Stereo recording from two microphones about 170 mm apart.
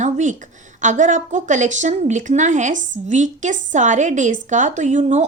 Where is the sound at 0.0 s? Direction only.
45° right (ahead or behind).